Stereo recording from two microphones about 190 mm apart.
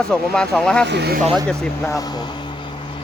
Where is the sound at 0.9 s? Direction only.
60° right (ahead or behind).